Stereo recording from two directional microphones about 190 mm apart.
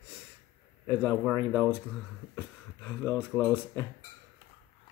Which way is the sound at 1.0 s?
5° left (ahead or behind).